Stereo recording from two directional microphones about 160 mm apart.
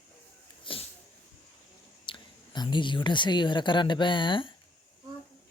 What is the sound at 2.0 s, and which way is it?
Speech, 30° left (ahead or behind).